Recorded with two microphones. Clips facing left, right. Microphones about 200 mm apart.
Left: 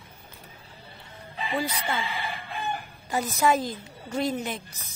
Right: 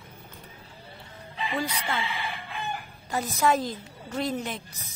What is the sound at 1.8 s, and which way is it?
Chicken, 40° left (ahead or behind).